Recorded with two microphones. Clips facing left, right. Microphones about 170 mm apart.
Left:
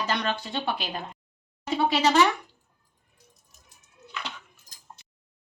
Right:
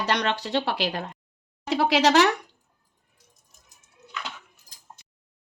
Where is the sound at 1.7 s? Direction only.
85° right.